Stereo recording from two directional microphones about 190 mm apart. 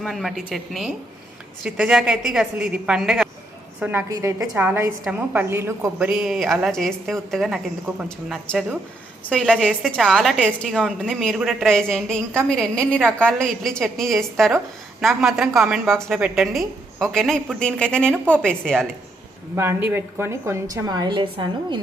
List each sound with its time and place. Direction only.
0.0 s a woman's voice: centre (ahead or behind)
6.1 s a woman's voice: centre (ahead or behind)
19.5 s a woman's voice: 15° right (ahead or behind)